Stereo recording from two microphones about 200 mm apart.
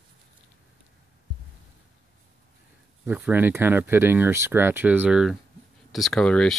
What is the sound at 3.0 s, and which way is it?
Speech, 5° right (ahead or behind).